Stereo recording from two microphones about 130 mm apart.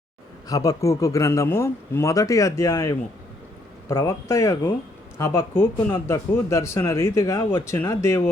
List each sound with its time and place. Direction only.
0.4 s speech: 30° left (ahead or behind)